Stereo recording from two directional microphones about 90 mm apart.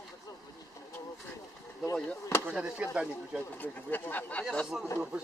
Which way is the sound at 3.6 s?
20° left (ahead or behind).